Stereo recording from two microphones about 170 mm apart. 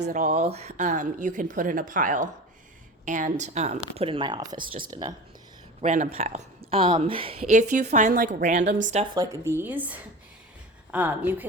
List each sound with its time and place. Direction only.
0.1 s speech: 40° right (ahead or behind); by 5.1 s 20° right (ahead or behind)
5.8 s a woman's voice: 45° right (ahead or behind)
9.1 s a woman's voice: 15° right (ahead or behind)